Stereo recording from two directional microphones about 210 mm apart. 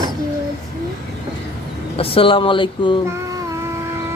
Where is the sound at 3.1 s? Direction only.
15° right (ahead or behind).